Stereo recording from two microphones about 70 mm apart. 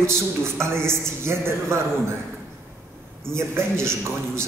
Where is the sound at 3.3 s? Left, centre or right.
Right.